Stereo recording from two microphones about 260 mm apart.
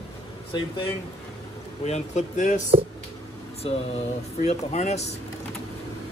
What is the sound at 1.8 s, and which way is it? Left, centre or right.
Speech, left.